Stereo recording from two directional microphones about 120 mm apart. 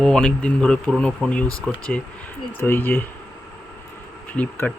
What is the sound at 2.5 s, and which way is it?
Speech, 15° left (ahead or behind).